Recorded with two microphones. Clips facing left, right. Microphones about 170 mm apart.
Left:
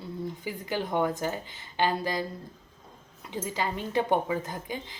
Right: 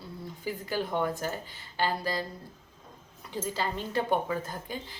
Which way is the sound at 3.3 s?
15° left (ahead or behind).